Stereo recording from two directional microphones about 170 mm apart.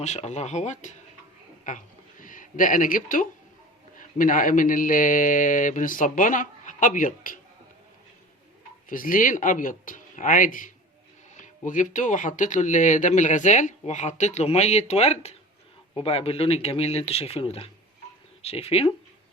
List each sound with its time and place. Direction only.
0.0 s speech: 40° left (ahead or behind)
1.6 s a sound: 50° left (ahead or behind)
3.9 s speech: 50° left (ahead or behind)
8.9 s speech: 55° left (ahead or behind); by 18.9 s 35° left (ahead or behind)